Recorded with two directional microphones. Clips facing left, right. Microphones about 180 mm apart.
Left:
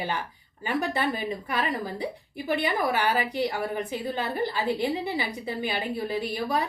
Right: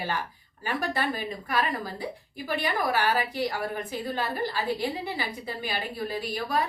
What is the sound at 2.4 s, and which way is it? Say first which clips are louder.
A woman's voice: left 2 dB; 20° left (ahead or behind).